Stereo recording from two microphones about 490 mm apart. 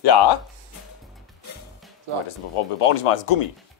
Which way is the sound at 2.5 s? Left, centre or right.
Left.